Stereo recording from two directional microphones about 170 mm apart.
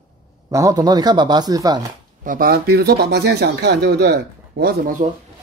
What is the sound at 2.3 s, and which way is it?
Speech, 60° right (ahead or behind).